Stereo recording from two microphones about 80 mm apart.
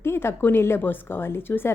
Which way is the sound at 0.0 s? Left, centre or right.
Left.